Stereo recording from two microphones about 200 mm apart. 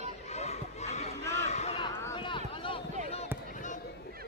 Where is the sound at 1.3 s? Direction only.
35° left (ahead or behind).